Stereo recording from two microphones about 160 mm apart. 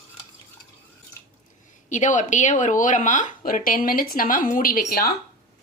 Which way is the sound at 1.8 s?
50° left (ahead or behind).